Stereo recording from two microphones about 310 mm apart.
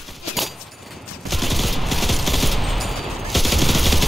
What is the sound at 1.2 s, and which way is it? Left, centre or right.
Fusillade, centre.